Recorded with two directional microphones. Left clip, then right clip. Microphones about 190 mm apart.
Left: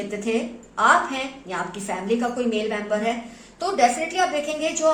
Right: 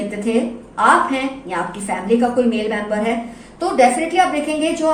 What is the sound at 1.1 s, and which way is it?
A woman's voice, 40° left (ahead or behind).